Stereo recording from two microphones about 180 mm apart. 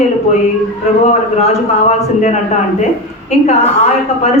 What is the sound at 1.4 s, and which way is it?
Speech, 40° left (ahead or behind).